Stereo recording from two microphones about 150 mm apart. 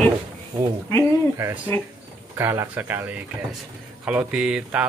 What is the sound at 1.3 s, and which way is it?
Speech, 20° right (ahead or behind).